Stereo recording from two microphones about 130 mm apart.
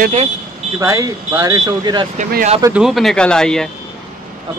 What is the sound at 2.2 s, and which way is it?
Speech, 75° right (ahead or behind).